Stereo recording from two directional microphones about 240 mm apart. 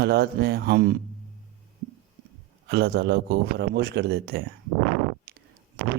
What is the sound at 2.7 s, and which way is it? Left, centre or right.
A man's voice, right.